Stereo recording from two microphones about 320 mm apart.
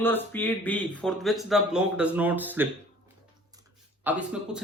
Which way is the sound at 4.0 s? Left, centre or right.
Centre.